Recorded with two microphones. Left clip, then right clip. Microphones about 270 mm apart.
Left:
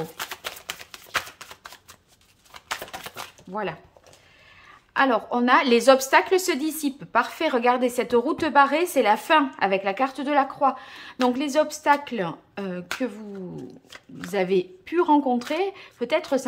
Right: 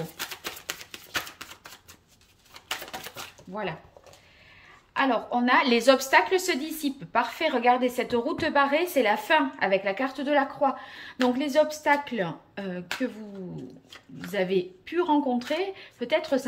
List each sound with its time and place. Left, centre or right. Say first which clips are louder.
4.9 s a woman's voice: left 4 dB; centre